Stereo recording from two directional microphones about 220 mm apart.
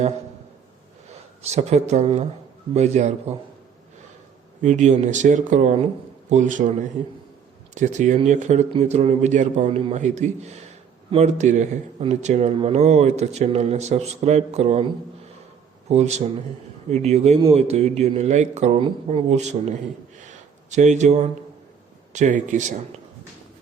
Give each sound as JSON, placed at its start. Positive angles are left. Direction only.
{"t": 1.4, "sound": "a man's voice", "side_deg": -30}
{"t": 4.6, "sound": "a man's voice", "side_deg": -30}
{"t": 15.9, "sound": "a man's voice", "side_deg": -30}